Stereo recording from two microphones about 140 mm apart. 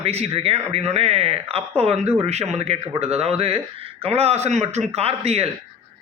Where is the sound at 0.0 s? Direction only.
45° right (ahead or behind).